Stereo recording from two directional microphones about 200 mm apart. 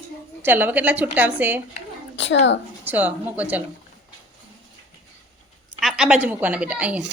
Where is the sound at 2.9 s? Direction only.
10° right (ahead or behind).